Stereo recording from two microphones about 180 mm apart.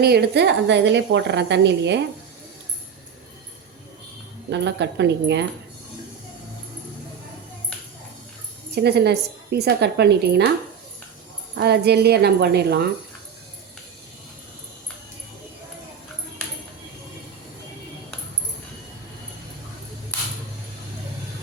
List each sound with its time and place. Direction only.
0.0 s a woman's voice: 65° right (ahead or behind)
4.4 s a woman's voice: 75° right (ahead or behind)
8.7 s a woman's voice: 65° right (ahead or behind)
11.5 s a woman's voice: 65° right (ahead or behind)